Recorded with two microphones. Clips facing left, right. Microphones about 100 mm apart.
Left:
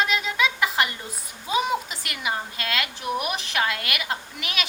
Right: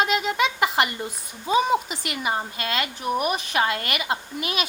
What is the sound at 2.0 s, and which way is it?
A woman's voice, 45° right (ahead or behind).